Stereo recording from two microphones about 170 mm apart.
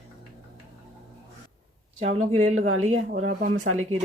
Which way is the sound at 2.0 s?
40° right (ahead or behind).